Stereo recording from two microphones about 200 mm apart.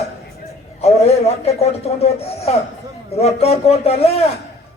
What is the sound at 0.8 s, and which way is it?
A man's voice, 30° left (ahead or behind).